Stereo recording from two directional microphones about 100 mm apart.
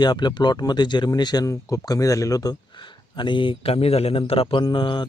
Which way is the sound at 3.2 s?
55° left (ahead or behind).